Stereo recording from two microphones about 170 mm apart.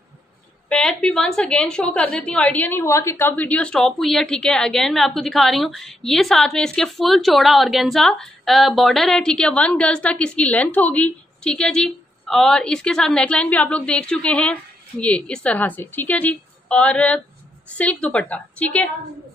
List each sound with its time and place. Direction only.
0.7 s a woman's voice: 5° left (ahead or behind)